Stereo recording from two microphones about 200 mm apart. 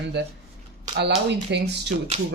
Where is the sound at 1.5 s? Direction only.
55° right (ahead or behind).